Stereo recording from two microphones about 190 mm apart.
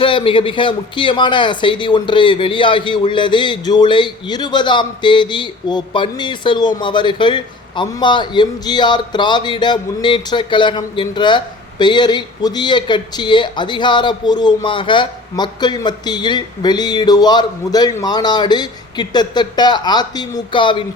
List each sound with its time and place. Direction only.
0.0 s speech: 25° left (ahead or behind)